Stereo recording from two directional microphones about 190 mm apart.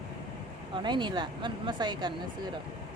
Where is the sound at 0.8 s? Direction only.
25° right (ahead or behind).